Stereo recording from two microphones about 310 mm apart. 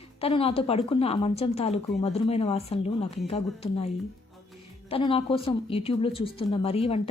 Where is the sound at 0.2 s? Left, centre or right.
Centre.